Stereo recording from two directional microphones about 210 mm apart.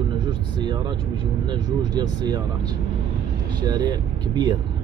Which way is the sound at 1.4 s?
20° right (ahead or behind).